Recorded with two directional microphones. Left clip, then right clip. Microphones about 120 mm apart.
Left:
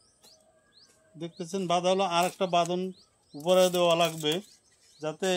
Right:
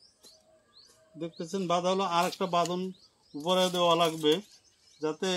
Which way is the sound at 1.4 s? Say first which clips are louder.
Left 2 dB; 40° left (ahead or behind).